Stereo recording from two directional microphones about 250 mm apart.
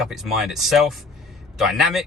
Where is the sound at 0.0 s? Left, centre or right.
Centre.